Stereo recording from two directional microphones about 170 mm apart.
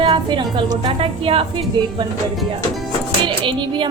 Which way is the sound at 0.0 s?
30° right (ahead or behind).